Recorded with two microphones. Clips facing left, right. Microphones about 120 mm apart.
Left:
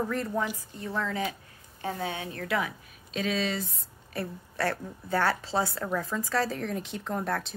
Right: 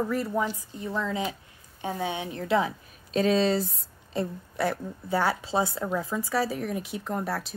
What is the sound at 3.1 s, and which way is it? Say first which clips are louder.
Speech: right 7 dB; 40° right (ahead or behind).